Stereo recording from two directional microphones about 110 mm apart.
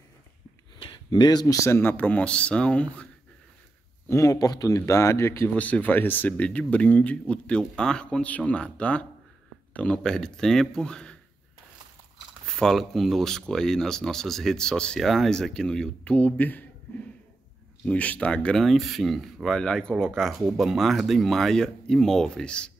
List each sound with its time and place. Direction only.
0.8 s speech: 40° left (ahead or behind); by 3.1 s 10° left (ahead or behind)
4.1 s speech: 25° left (ahead or behind); by 11.1 s 5° left (ahead or behind)
12.4 s speech: 5° left (ahead or behind)
17.8 s speech: 15° left (ahead or behind)